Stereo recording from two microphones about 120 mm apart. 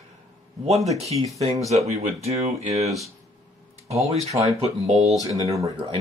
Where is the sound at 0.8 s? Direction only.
60° right (ahead or behind).